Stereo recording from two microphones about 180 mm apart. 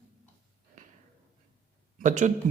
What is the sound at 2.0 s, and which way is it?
Speech, 45° right (ahead or behind).